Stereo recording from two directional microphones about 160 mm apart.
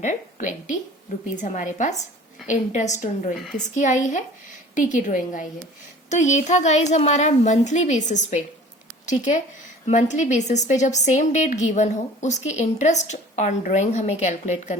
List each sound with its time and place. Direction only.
0.0 s a woman's voice: 50° left (ahead or behind)